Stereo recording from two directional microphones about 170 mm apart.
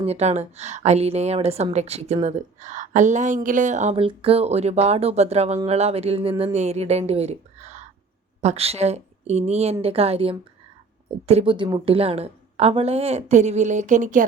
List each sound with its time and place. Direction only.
0.0 s a woman's voice: 40° right (ahead or behind)